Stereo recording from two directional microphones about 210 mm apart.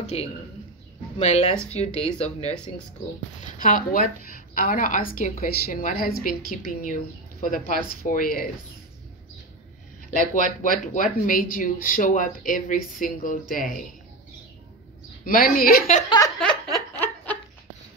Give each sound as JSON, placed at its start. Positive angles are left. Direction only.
{"t": 0.0, "sound": "a sound", "side_deg": 30}
{"t": 1.1, "sound": "speech", "side_deg": 30}
{"t": 1.9, "sound": "speech", "side_deg": 5}
{"t": 2.1, "sound": "a woman's voice", "side_deg": 30}
{"t": 3.5, "sound": "a woman's voice", "side_deg": 40}
{"t": 10.1, "sound": "a woman's voice", "side_deg": 40}
{"t": 15.2, "sound": "a woman's voice", "side_deg": 45}
{"t": 16.3, "sound": "a sound", "side_deg": 5}